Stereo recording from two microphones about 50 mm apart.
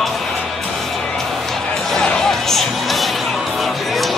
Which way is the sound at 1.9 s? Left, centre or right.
Centre.